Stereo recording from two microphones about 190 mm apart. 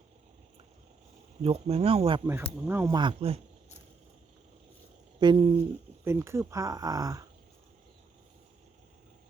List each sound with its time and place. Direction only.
1.4 s speech: 30° right (ahead or behind)
2.6 s speech: 15° right (ahead or behind); by 3.4 s 30° right (ahead or behind)
5.2 s speech: 25° right (ahead or behind)
6.1 s speech: 15° right (ahead or behind)